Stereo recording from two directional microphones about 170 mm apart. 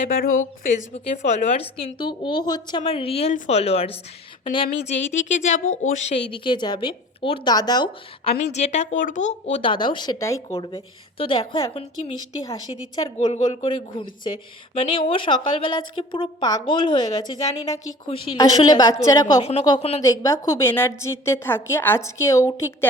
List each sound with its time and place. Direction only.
0.0 s a woman's voice: 55° left (ahead or behind); by 19.3 s 20° left (ahead or behind)
19.4 s a woman's voice: 35° left (ahead or behind)
20.1 s a woman's voice: 20° left (ahead or behind)